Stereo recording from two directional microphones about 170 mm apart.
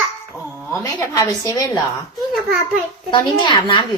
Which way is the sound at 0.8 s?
20° left (ahead or behind).